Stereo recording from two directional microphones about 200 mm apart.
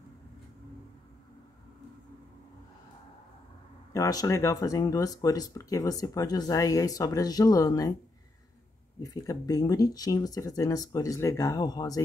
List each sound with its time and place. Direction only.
3.9 s speech: 15° left (ahead or behind)
9.0 s speech: 15° left (ahead or behind)